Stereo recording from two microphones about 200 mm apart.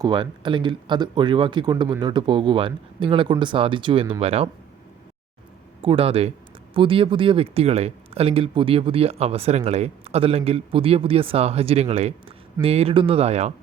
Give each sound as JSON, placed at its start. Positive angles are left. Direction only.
{"t": 0.0, "sound": "speech", "side_deg": -25}
{"t": 5.8, "sound": "speech", "side_deg": -25}